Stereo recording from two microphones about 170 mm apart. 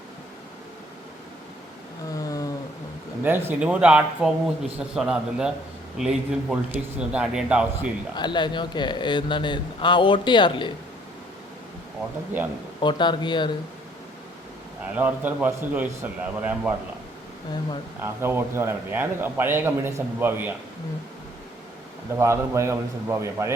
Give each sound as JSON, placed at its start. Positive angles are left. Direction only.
{"t": 2.1, "sound": "a sound", "side_deg": 20}
{"t": 3.2, "sound": "a man's voice", "side_deg": -10}
{"t": 8.1, "sound": "speech", "side_deg": 25}
{"t": 12.8, "sound": "speech", "side_deg": 25}
{"t": 14.9, "sound": "a man's voice", "side_deg": -10}
{"t": 18.0, "sound": "a man's voice", "side_deg": -15}
{"t": 22.2, "sound": "a man's voice", "side_deg": -15}